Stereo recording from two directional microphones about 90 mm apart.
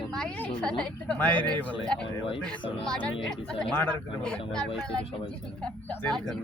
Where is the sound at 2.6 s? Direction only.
80° left.